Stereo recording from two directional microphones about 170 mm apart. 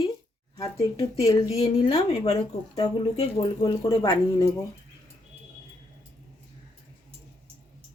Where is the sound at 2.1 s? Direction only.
40° left (ahead or behind).